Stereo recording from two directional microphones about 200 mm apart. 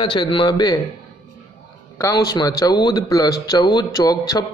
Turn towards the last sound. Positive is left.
turn(degrees=20)  # may be behind; listen again after turning